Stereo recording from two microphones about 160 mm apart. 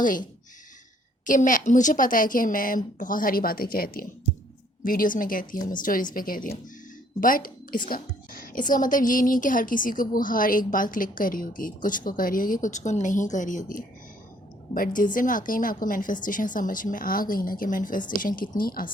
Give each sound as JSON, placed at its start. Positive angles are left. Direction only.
{"t": 0.0, "sound": "a woman's voice", "side_deg": 55}